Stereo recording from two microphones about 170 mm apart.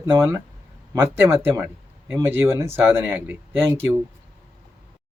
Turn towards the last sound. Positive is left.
turn(degrees=-10)  # may be behind; listen again after turning